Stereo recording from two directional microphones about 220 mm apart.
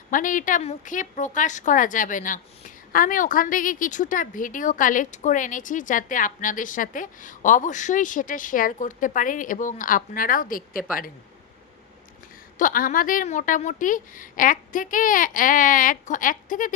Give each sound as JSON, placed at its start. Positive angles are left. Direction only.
{"t": 0.1, "sound": "a woman's voice", "side_deg": 35}
{"t": 12.5, "sound": "a woman's voice", "side_deg": 40}